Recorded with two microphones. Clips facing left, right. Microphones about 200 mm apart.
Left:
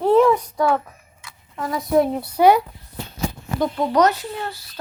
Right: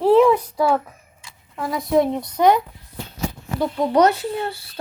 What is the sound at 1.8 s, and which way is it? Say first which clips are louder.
Speech: even; 5° left (ahead or behind).